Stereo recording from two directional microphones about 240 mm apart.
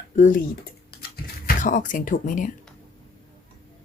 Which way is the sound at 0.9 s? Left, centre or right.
Left.